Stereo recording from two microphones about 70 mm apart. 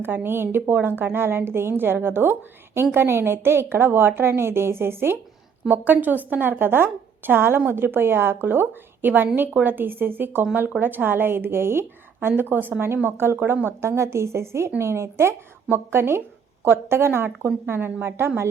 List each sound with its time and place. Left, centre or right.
0.0 s a woman's voice: right